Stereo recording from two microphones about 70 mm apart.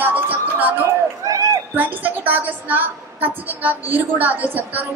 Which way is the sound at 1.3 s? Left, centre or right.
Right.